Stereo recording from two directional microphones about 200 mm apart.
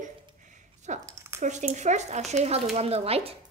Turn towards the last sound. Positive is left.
turn(degrees=-30)  # may be behind; listen again after turning